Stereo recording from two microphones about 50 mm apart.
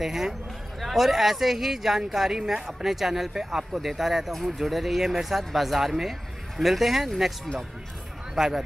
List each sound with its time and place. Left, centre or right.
0.0 s speech: centre
8.4 s speech: centre